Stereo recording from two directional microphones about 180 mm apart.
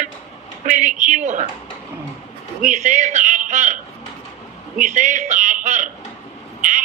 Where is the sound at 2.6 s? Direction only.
45° right (ahead or behind).